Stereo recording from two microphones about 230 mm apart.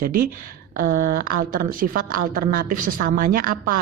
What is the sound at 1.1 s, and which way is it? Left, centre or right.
Speech, right.